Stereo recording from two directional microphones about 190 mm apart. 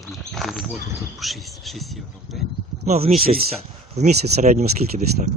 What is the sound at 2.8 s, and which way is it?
Speech, 35° right (ahead or behind).